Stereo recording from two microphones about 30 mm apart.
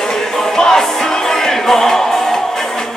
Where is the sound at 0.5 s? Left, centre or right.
Centre.